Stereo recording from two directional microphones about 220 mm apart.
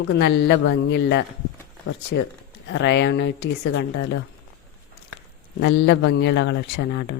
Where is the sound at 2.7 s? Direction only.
55° left (ahead or behind).